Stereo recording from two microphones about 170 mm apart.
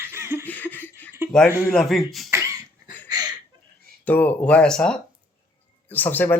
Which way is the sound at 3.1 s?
25° right (ahead or behind).